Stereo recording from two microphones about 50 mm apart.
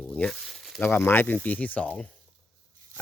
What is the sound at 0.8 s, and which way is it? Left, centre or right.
Speech, left.